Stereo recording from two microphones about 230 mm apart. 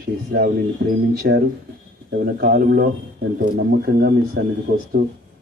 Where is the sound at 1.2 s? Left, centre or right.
Right.